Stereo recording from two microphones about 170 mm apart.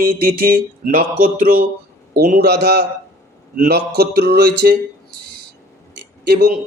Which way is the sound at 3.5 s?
60° right (ahead or behind).